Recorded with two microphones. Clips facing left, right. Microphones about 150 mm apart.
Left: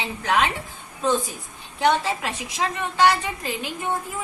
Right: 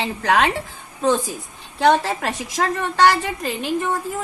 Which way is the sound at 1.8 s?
75° right (ahead or behind).